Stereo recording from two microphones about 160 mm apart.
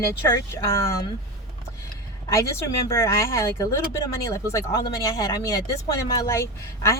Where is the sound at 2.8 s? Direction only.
15° left (ahead or behind).